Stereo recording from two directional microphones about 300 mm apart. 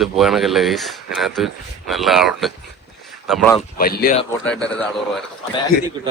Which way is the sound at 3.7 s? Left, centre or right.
Left.